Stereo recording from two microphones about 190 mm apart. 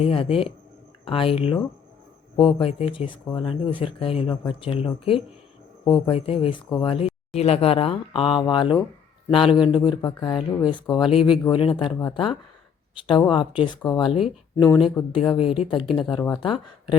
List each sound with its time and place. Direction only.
0.0 s speech: 30° left (ahead or behind)
15.3 s speech: 25° left (ahead or behind)